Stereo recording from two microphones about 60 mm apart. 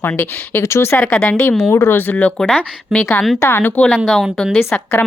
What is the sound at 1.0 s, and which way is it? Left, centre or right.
Speech, centre.